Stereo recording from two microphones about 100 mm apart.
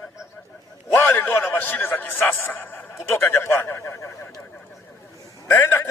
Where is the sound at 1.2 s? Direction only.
15° left (ahead or behind).